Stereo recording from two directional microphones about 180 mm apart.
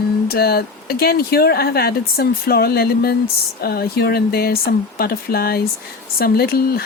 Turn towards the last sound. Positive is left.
turn(degrees=55)  # may be behind; listen again after turning